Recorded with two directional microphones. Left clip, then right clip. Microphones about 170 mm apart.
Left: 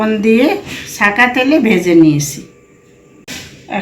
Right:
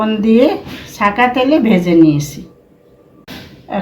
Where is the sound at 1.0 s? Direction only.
30° right (ahead or behind).